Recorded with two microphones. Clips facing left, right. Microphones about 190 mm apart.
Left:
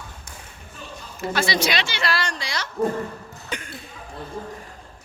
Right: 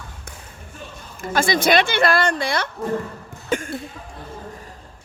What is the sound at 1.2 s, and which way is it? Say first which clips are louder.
Speech: right 3 dB; 50° right (ahead or behind).